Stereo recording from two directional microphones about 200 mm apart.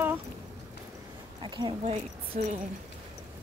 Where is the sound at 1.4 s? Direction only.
25° right (ahead or behind).